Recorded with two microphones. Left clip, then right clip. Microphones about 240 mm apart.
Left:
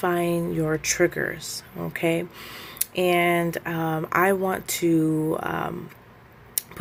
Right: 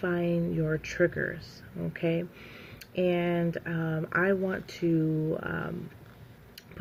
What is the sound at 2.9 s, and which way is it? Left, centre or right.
Speech, left.